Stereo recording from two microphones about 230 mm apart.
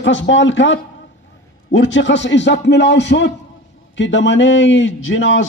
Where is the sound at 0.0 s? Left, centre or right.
Left.